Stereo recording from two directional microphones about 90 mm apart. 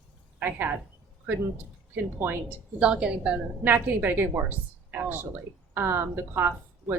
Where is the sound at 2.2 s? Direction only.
25° right (ahead or behind).